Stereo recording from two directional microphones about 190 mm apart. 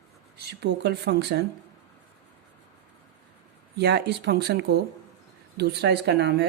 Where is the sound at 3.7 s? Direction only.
60° right (ahead or behind).